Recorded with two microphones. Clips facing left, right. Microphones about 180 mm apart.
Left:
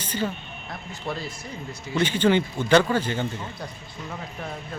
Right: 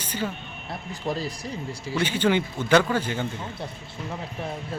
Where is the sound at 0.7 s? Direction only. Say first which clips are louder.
Right 3 dB; 10° right (ahead or behind).